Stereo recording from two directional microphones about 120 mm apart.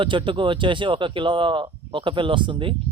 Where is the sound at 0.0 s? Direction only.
45° right (ahead or behind).